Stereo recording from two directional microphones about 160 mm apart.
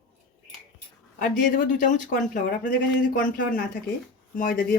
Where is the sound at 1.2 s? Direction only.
60° left (ahead or behind).